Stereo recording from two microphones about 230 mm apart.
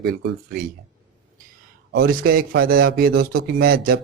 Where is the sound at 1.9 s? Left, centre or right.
Right.